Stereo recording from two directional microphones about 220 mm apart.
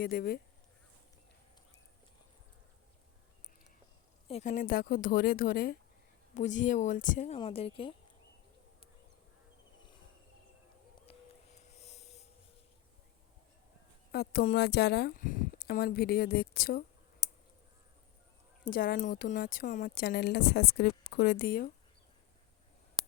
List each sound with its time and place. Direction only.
0.0 s a woman's voice: 40° left (ahead or behind)
4.3 s a woman's voice: 30° left (ahead or behind)
7.3 s a woman's voice: 25° left (ahead or behind)
11.0 s a sound: 30° left (ahead or behind)
14.1 s a woman's voice: 45° left (ahead or behind)
18.7 s a woman's voice: 40° left (ahead or behind)